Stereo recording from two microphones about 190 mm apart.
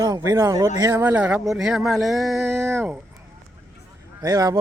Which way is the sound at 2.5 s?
15° right (ahead or behind).